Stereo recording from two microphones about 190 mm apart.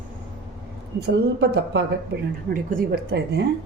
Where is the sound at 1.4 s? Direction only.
60° right (ahead or behind).